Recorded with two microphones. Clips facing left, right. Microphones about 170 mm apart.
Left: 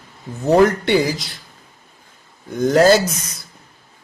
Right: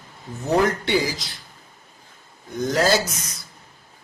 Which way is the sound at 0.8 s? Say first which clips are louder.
Left 5 dB; 60° left (ahead or behind).